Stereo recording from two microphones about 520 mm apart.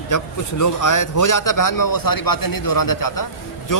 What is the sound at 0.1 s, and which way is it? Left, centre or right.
Speech, left.